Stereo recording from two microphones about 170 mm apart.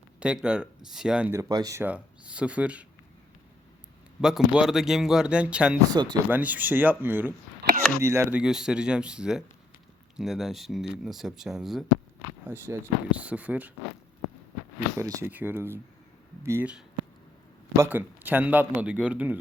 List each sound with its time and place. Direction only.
0.2 s a man's voice: 5° right (ahead or behind)
1.4 s a man's voice: 20° right (ahead or behind)
4.2 s a man's voice: 5° right (ahead or behind)
5.9 s speech: 25° right (ahead or behind)
6.2 s a man's voice: 10° right (ahead or behind)
12.5 s a man's voice: 15° right (ahead or behind)
14.9 s a man's voice: 15° right (ahead or behind)